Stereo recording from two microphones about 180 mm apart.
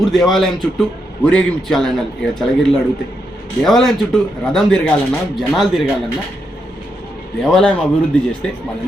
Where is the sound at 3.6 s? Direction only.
Centre (ahead or behind).